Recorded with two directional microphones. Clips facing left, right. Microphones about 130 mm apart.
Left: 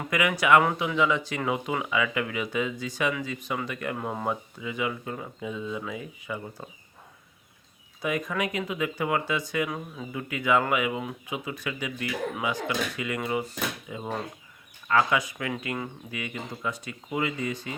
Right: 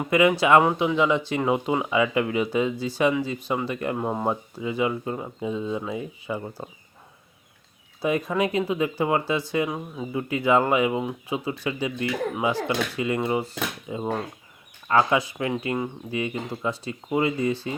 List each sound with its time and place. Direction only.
0.1 s speech: 25° right (ahead or behind)
8.0 s speech: 30° right (ahead or behind)